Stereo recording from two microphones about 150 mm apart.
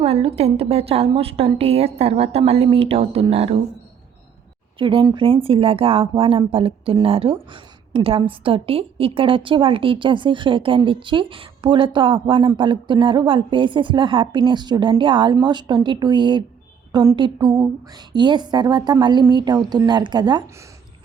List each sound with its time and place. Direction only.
0.0 s speech: 40° right (ahead or behind)
4.8 s a woman's voice: 35° right (ahead or behind)